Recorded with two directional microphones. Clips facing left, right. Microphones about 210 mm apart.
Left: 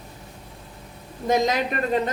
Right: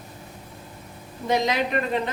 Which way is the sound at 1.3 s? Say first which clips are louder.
Left 1 dB; 45° left (ahead or behind).